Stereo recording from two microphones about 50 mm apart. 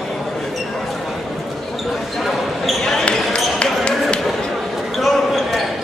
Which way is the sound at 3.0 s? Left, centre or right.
Left.